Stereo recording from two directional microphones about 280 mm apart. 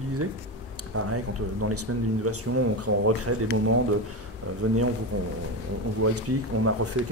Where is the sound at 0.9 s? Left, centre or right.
Right.